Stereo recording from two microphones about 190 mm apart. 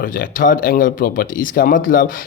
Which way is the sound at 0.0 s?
45° left (ahead or behind).